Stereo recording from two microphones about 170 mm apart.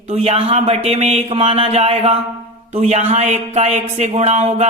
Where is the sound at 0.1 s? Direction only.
40° right (ahead or behind).